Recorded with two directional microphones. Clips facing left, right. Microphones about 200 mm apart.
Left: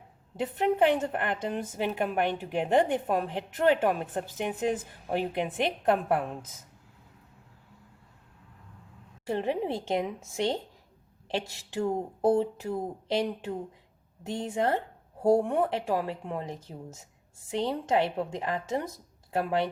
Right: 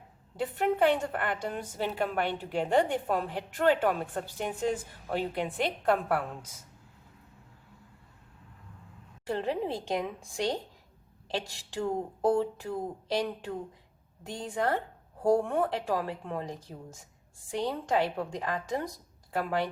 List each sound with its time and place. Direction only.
0.3 s a woman's voice: 20° left (ahead or behind)
9.2 s a woman's voice: 20° left (ahead or behind)